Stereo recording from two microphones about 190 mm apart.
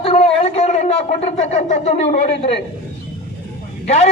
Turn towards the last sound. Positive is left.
turn(degrees=35)  # may be behind; listen again after turning